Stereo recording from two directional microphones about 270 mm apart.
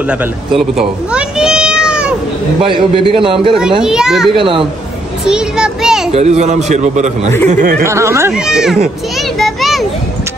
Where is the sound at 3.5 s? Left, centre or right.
Centre.